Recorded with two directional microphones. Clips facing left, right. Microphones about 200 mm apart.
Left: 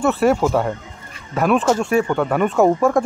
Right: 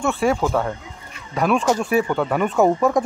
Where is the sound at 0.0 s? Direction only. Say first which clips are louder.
Left 4 dB; 5° left (ahead or behind).